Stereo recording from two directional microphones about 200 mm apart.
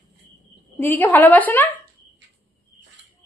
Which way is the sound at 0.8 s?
10° left (ahead or behind).